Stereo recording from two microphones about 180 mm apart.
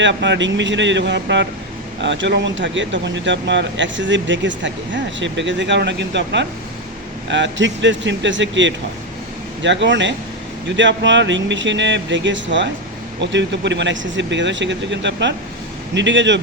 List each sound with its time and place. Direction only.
0.0 s speech: 80° right
7.3 s speech: 90° right
13.2 s speech: 80° right